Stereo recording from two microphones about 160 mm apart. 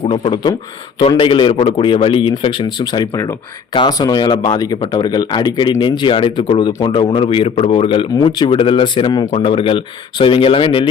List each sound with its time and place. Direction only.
0.1 s speech: 30° left (ahead or behind)